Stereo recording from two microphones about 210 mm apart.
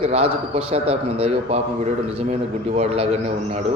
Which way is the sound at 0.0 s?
30° right (ahead or behind).